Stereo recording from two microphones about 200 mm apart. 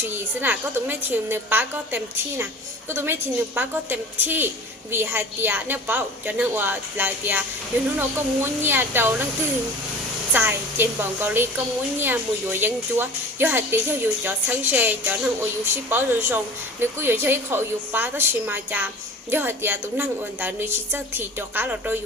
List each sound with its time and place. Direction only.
0.0 s a woman's voice: 10° right (ahead or behind)
10.3 s a woman's voice: 10° right (ahead or behind)